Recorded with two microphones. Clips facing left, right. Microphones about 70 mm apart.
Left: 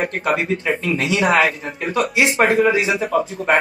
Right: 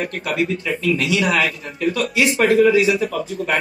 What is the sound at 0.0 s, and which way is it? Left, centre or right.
Speech, left.